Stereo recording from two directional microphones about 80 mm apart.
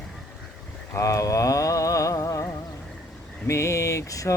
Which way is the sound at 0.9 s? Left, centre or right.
Left.